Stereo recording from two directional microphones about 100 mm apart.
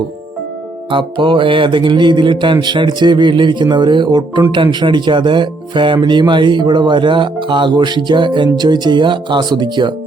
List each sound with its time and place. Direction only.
0.9 s speech: 55° right (ahead or behind)